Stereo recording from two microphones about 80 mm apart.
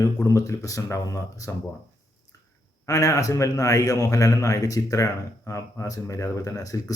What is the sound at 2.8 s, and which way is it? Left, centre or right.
A man's voice, left.